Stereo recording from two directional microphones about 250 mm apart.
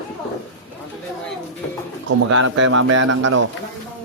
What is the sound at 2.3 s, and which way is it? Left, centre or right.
Speech, right.